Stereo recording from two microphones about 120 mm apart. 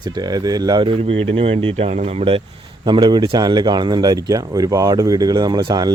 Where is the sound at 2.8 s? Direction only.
40° right (ahead or behind).